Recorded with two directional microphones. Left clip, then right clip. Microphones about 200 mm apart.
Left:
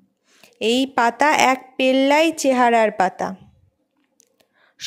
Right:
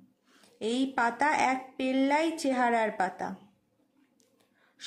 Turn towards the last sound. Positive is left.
turn(degrees=40)  # may be behind; listen again after turning